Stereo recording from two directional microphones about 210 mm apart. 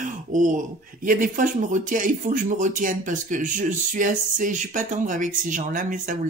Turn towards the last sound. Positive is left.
turn(degrees=-40)  # may be behind; listen again after turning